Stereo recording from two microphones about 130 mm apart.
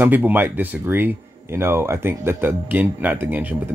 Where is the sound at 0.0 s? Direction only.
15° right (ahead or behind).